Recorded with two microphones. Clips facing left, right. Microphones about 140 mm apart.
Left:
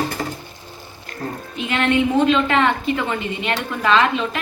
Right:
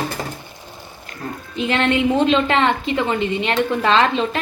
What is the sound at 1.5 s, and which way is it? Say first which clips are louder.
A woman's voice: right 1 dB; 30° right (ahead or behind).